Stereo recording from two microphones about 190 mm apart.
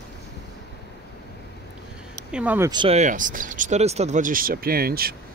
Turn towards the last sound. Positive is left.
turn(degrees=-50)  # may be behind; listen again after turning